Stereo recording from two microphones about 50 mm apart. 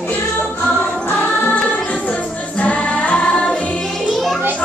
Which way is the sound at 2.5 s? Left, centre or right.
Left.